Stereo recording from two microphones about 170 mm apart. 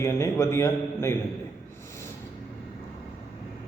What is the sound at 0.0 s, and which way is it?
A man's voice, 15° left (ahead or behind).